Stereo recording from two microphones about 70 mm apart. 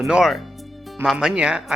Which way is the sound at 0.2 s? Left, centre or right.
Centre.